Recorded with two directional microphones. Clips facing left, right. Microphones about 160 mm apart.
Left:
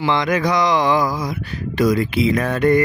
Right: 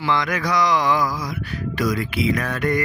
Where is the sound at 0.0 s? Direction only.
25° left (ahead or behind).